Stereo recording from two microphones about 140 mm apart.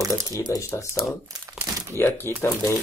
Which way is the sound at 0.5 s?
20° left (ahead or behind).